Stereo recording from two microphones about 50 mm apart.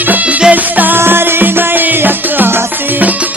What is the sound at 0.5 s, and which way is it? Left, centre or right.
Music, right.